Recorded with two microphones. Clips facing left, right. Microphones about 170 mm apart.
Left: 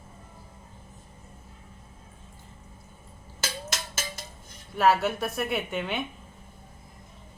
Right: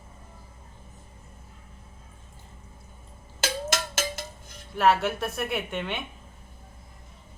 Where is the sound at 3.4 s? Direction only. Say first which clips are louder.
Right 6 dB; 80° right.